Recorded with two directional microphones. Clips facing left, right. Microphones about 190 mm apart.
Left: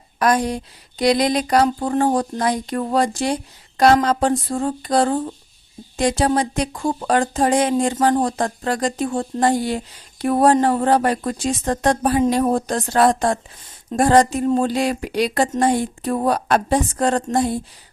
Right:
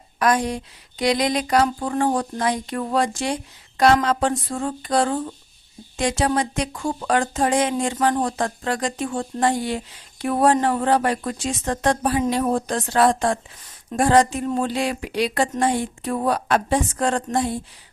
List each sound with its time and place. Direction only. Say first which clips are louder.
0.2 s speech: left 2 dB; 35° left (ahead or behind)